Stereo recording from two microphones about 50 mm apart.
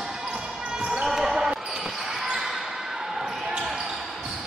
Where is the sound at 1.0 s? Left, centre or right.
Centre.